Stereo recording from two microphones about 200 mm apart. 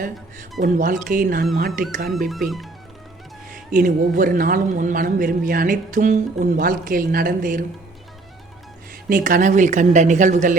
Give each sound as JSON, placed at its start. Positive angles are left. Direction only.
{"t": 0.6, "sound": "a man's voice", "side_deg": -40}
{"t": 2.0, "sound": "speech", "side_deg": 0}
{"t": 3.7, "sound": "a man's voice", "side_deg": -45}
{"t": 9.0, "sound": "speech", "side_deg": -45}